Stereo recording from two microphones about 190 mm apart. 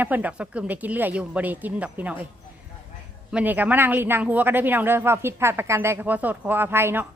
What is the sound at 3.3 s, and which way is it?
A woman's voice, 10° right (ahead or behind).